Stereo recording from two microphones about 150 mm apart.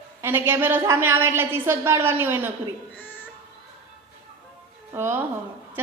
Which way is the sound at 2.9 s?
10° left (ahead or behind).